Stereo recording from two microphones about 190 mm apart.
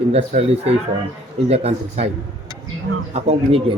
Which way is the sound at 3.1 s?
35° right (ahead or behind).